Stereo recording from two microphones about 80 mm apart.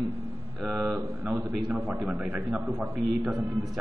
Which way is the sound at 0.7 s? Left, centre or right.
Centre.